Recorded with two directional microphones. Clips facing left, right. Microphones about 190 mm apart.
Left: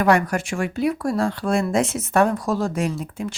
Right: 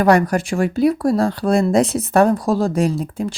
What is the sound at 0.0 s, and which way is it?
Speech, 35° right (ahead or behind).